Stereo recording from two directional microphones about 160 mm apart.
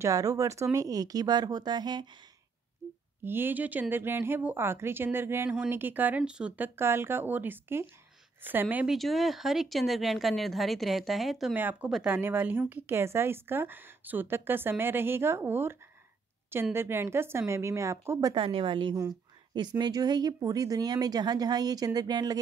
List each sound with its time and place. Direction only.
0.0 s speech: 20° right (ahead or behind)
3.3 s speech: 15° right (ahead or behind)
8.9 s speech: centre (ahead or behind); by 18.3 s 15° right (ahead or behind)
18.3 s a woman's voice: 30° right (ahead or behind)